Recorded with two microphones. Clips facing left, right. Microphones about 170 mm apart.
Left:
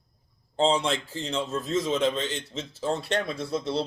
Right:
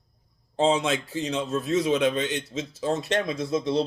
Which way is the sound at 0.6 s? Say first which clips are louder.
Right 1 dB; 20° right (ahead or behind).